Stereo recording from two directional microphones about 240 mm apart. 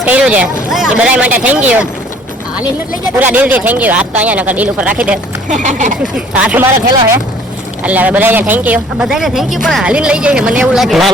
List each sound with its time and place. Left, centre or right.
0.0 s speech: centre
3.2 s a man's voice: centre
5.5 s speech: right
6.1 s speech: centre
7.9 s a man's voice: centre